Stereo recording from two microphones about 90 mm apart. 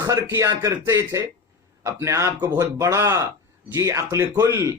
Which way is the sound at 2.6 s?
35° right (ahead or behind).